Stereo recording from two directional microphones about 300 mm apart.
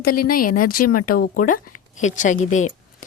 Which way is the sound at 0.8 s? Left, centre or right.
Left.